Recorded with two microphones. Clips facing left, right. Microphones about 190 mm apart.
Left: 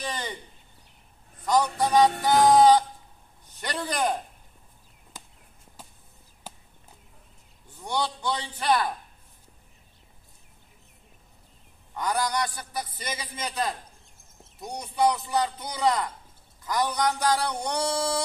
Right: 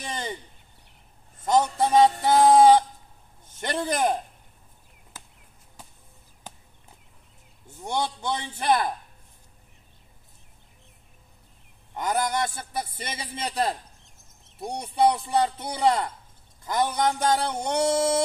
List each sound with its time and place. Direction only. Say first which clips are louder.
0.0 s a sound: even; 25° right (ahead or behind)
1.4 s a man's voice: right 2 dB; 25° right (ahead or behind)
7.8 s a man's voice: right 1 dB; 25° right (ahead or behind)
11.9 s a man's voice: right 1 dB; 25° right (ahead or behind)